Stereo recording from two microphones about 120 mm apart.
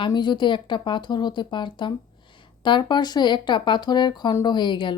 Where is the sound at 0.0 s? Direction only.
40° left (ahead or behind).